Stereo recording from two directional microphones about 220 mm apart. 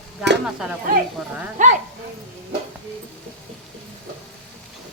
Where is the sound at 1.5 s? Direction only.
35° right (ahead or behind).